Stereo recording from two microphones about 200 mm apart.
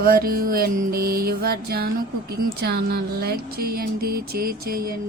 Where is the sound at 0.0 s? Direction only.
45° right (ahead or behind).